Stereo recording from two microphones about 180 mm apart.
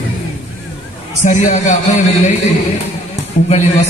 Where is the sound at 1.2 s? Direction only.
40° left (ahead or behind).